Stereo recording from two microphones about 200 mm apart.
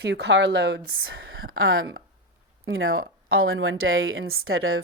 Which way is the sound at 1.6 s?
85° right.